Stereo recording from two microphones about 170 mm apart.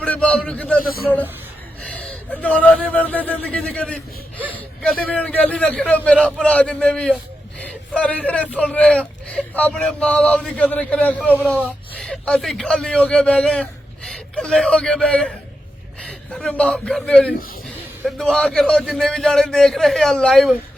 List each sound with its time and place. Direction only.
0.0 s a sound: 5° left (ahead or behind)
0.8 s a man's voice: 60° left (ahead or behind)
1.8 s a man's voice: 5° left (ahead or behind)